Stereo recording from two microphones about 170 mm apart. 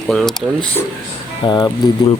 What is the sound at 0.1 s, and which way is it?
Speech, centre (ahead or behind).